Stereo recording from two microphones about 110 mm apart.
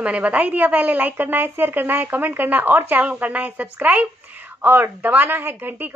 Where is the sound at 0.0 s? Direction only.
10° right (ahead or behind).